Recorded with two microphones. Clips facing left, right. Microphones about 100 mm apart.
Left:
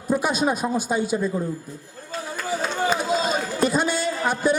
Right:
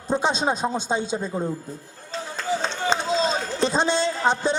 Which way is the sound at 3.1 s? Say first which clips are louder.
Even; 25° right (ahead or behind).